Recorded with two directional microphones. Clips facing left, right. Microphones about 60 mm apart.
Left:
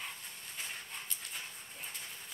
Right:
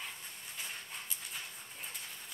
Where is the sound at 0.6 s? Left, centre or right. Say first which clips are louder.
Left 1 dB; centre.